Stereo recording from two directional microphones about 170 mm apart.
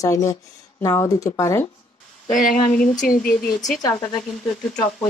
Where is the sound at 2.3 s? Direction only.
55° left (ahead or behind).